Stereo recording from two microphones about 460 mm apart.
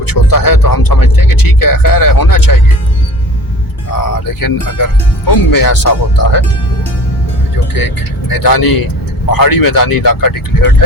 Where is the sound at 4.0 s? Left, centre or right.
Left.